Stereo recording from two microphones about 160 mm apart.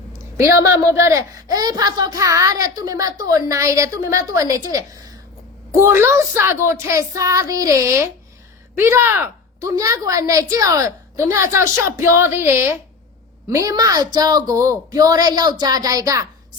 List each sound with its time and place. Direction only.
0.3 s a woman's voice: 20° right (ahead or behind)